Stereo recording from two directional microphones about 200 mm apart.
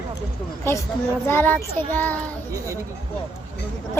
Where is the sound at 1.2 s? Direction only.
10° left (ahead or behind).